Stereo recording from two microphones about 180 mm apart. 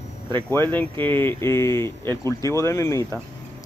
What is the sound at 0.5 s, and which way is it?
Speech, 10° left (ahead or behind).